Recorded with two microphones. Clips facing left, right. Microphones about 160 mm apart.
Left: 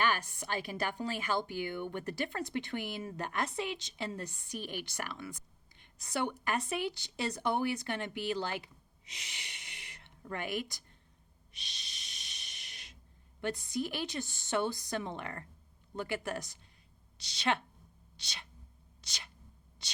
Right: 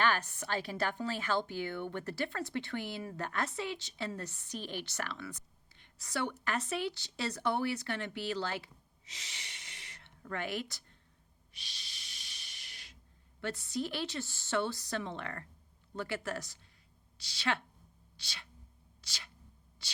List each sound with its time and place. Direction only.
0.0 s a woman's voice: 15° left (ahead or behind)
11.5 s snort: 20° left (ahead or behind)
13.4 s a woman's voice: 15° left (ahead or behind)
19.0 s a sound: 20° left (ahead or behind)
19.8 s whispering: 20° left (ahead or behind)